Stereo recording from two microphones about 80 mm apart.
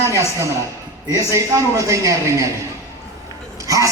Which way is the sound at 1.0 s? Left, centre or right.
Right.